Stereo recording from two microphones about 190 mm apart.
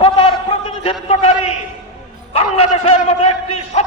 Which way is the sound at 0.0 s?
30° left (ahead or behind).